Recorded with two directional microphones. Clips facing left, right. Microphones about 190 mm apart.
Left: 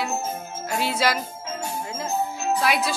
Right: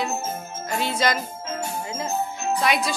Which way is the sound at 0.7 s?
5° left (ahead or behind).